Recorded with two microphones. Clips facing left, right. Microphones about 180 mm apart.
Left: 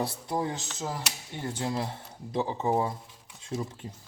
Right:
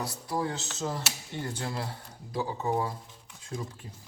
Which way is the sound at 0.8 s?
10° left (ahead or behind).